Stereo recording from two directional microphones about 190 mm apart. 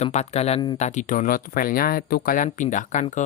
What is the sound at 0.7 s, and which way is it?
Speech, 40° left (ahead or behind).